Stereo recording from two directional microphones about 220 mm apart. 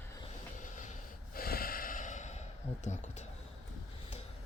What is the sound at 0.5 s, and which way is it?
Snort, 35° left (ahead or behind).